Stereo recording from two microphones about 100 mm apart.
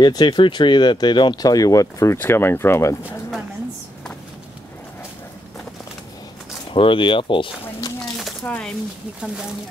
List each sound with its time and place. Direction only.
0.0 s speech: 45° left (ahead or behind)
2.1 s speech: 25° left (ahead or behind)
6.7 s speech: 60° left (ahead or behind)
8.5 s speech: 10° left (ahead or behind)